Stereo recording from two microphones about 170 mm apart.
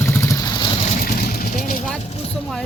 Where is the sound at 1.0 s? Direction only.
60° left (ahead or behind).